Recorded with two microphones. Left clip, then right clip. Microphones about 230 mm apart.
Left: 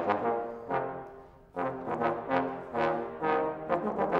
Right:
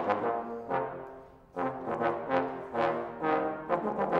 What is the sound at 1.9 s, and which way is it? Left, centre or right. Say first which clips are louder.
Brass instrument: even; left.